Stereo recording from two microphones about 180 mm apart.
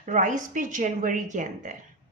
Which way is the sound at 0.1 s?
45° right (ahead or behind).